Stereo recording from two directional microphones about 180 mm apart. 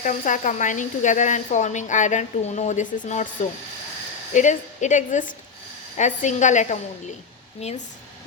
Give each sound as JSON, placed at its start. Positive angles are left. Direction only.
{"t": 0.0, "sound": "a woman's voice", "side_deg": 45}
{"t": 4.4, "sound": "a woman's voice", "side_deg": 45}